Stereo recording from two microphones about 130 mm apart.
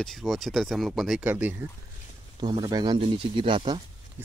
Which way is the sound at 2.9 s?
45° right (ahead or behind).